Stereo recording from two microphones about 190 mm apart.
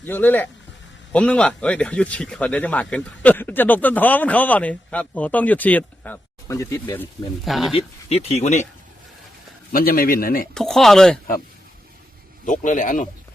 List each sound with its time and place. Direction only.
0.0 s speech: 10° left (ahead or behind)
7.4 s speech: centre (ahead or behind)
7.8 s speech: 30° left (ahead or behind)
9.7 s speech: 50° left (ahead or behind)
10.5 s speech: centre (ahead or behind)
12.5 s speech: 45° left (ahead or behind)